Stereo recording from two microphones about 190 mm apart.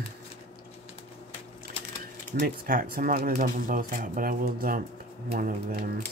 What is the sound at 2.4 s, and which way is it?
Speech, 50° right (ahead or behind).